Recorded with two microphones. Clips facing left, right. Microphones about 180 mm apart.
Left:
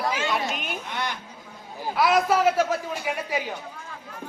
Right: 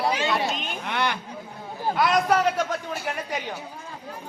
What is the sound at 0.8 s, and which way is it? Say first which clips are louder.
Chatter: right 8 dB; 65° right (ahead or behind).